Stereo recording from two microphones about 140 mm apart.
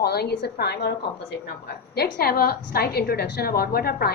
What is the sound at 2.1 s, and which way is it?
A woman's voice, 90° left.